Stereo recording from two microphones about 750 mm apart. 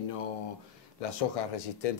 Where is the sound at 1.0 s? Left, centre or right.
Left.